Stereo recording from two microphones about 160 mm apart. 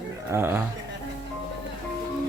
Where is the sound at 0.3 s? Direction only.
15° right (ahead or behind).